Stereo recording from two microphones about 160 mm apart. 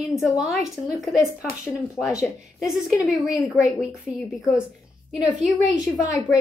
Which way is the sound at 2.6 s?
5° right (ahead or behind).